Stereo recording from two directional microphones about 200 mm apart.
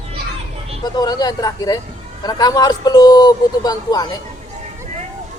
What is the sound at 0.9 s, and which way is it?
Speech, 20° left (ahead or behind).